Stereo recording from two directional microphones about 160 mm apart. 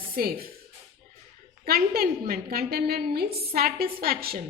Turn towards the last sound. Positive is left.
turn(degrees=-70)  # may be behind; listen again after turning